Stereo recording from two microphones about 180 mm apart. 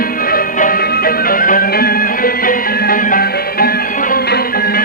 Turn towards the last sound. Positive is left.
turn(degrees=55)  # may be behind; listen again after turning